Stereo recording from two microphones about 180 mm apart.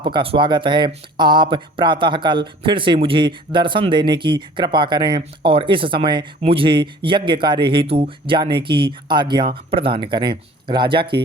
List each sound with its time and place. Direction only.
0.0 s speech: 30° right (ahead or behind)